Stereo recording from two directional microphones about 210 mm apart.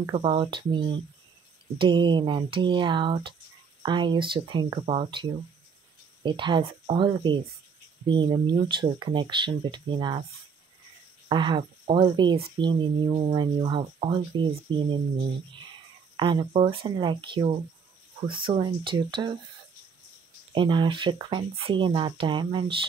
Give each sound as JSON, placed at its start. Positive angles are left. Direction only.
{"t": 0.1, "sound": "speech", "side_deg": -25}
{"t": 11.2, "sound": "speech", "side_deg": -20}
{"t": 16.2, "sound": "speech", "side_deg": -25}
{"t": 20.5, "sound": "speech", "side_deg": -20}